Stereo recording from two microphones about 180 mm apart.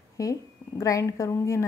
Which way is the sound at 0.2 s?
20° left (ahead or behind).